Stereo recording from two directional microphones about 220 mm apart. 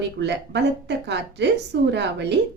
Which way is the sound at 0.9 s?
50° right (ahead or behind).